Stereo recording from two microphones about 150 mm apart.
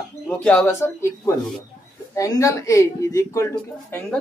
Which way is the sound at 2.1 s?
20° left (ahead or behind).